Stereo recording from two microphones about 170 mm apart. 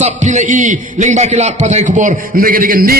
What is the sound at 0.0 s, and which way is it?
A man's voice, 45° right (ahead or behind).